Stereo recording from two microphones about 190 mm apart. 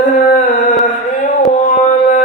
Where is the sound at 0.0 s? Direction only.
45° left (ahead or behind).